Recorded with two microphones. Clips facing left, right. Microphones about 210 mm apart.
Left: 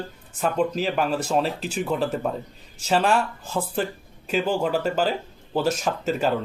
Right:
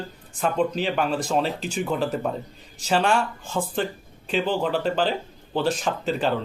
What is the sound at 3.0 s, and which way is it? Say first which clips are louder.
Speech: left 1 dB; 35° left (ahead or behind).